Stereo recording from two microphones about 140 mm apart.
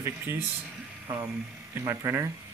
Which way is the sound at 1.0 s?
25° right (ahead or behind).